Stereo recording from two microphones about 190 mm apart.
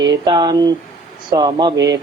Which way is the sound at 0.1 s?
20° right (ahead or behind).